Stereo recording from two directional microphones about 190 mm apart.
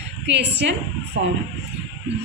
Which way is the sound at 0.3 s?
65° right (ahead or behind).